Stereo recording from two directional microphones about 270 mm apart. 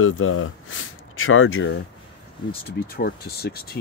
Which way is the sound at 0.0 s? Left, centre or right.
Left.